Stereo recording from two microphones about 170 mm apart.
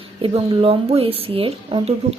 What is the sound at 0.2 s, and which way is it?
Speech, 35° right (ahead or behind).